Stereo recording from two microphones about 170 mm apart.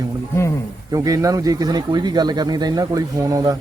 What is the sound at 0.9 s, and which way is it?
Speech, 20° right (ahead or behind).